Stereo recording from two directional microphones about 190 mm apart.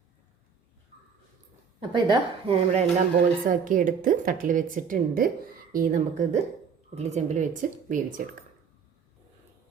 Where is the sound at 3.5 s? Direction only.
45° right (ahead or behind).